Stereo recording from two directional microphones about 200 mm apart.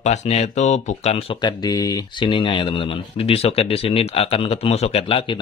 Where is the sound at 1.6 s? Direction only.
20° left (ahead or behind).